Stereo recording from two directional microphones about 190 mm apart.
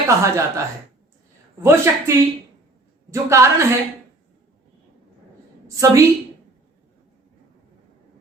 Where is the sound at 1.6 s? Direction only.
15° right (ahead or behind).